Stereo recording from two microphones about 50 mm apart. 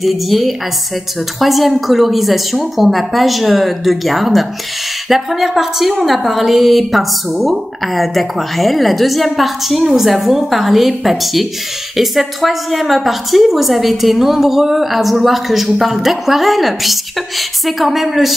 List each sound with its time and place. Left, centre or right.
0.0 s a woman's voice: centre